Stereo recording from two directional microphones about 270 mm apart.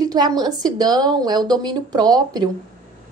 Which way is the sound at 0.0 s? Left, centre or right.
Centre.